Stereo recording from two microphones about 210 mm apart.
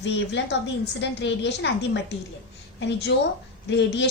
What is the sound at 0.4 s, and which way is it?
A woman's voice, 60° left (ahead or behind).